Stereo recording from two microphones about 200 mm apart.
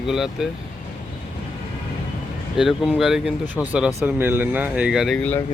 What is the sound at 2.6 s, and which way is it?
Speech, centre (ahead or behind).